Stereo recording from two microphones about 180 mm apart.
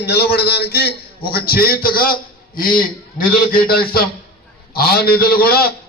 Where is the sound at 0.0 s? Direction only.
65° left (ahead or behind).